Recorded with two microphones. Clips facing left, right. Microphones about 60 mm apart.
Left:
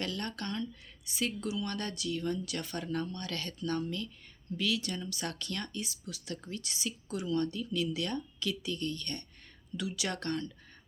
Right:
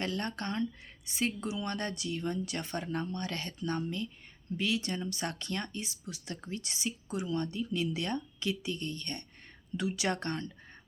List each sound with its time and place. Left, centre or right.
0.0 s speech: right